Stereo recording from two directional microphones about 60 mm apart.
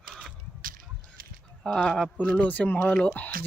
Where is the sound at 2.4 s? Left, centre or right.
Left.